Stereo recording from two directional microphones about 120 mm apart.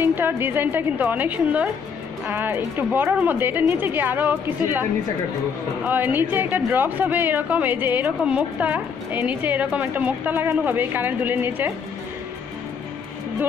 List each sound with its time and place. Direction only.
0.0 s a woman's voice: 20° right (ahead or behind)
5.9 s a woman's voice: 15° right (ahead or behind)